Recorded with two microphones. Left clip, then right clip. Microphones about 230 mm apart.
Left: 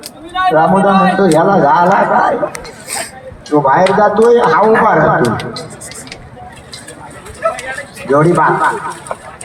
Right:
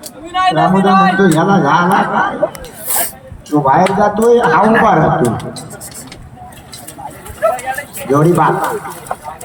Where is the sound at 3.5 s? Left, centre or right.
Left.